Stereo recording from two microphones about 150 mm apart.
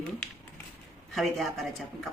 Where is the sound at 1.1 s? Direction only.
Centre (ahead or behind).